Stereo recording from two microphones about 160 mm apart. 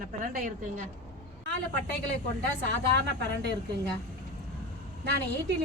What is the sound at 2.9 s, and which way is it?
Speech, 90° right.